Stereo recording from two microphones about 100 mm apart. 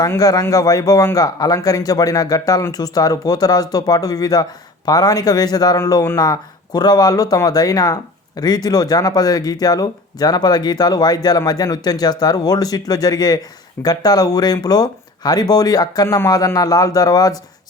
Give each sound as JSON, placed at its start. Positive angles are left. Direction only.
{"t": 0.2, "sound": "speech", "side_deg": 40}
{"t": 16.0, "sound": "speech", "side_deg": 25}
{"t": 16.3, "sound": "speech", "side_deg": 40}